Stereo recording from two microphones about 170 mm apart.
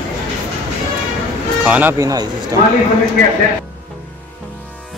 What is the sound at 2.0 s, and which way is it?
Speech, 20° right (ahead or behind).